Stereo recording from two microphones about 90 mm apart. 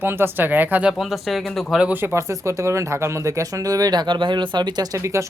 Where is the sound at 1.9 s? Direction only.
25° right (ahead or behind).